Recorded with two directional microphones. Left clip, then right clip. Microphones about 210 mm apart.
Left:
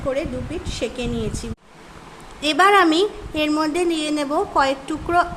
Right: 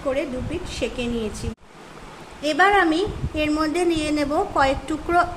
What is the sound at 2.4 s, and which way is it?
A woman's voice, 25° left (ahead or behind).